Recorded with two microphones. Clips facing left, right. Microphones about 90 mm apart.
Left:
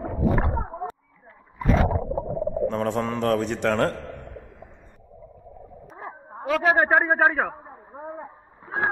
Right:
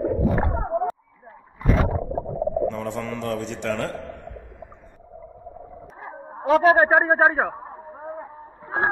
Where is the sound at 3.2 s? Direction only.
55° left (ahead or behind).